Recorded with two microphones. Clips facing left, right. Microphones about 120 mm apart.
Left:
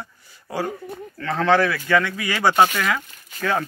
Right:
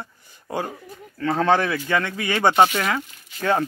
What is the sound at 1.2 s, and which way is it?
Speech, 20° right (ahead or behind).